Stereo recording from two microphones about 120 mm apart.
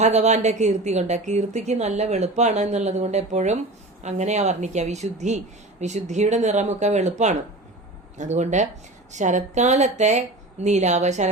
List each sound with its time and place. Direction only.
0.0 s a woman's voice: 70° right (ahead or behind)